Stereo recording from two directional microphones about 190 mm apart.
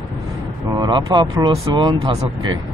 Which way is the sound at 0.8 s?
25° right (ahead or behind).